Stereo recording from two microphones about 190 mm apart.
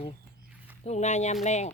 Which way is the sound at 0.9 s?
35° left (ahead or behind).